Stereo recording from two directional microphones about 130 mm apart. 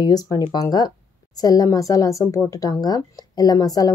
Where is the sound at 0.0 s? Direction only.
30° left (ahead or behind).